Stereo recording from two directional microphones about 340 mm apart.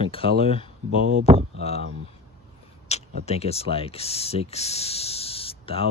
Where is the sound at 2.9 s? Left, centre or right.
Centre.